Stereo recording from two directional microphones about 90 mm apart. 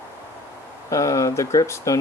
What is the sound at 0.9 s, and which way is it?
Speech, 40° left (ahead or behind).